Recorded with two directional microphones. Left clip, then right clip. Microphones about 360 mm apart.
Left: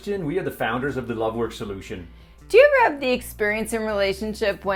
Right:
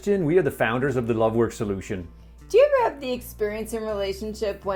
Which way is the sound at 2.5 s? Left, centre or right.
Centre.